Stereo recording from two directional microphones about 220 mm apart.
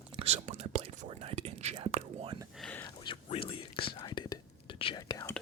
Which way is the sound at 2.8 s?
20° left (ahead or behind).